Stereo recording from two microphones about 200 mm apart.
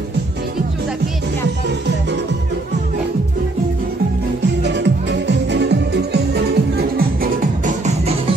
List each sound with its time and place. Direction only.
4.6 s music: 60° right (ahead or behind); by 8.1 s 35° right (ahead or behind)